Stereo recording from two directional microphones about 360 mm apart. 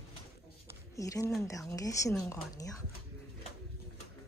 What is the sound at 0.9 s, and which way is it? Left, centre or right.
A woman's voice, centre.